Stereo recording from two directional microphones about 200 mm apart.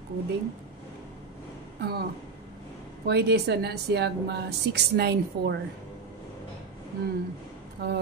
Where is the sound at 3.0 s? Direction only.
55° right (ahead or behind).